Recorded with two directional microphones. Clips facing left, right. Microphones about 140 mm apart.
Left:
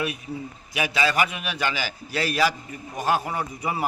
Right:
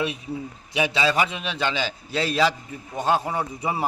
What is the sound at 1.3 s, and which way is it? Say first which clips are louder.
A man's voice: right 1 dB; 25° right (ahead or behind).